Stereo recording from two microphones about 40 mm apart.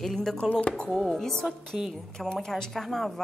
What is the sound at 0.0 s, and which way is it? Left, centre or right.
Speech, centre.